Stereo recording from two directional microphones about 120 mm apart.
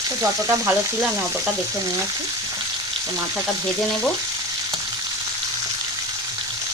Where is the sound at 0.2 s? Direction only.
25° right (ahead or behind).